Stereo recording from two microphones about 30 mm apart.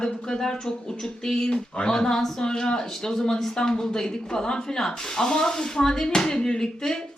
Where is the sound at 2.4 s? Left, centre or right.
Left.